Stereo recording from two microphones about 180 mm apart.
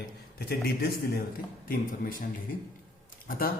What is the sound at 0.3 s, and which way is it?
Speech, 60° left (ahead or behind).